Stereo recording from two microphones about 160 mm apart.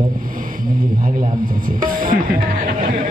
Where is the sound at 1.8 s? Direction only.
60° right (ahead or behind).